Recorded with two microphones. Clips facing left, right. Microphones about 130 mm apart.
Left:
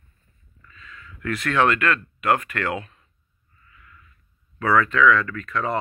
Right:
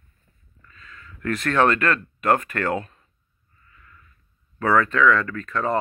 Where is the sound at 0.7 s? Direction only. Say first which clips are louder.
Left 1 dB; 40° right (ahead or behind).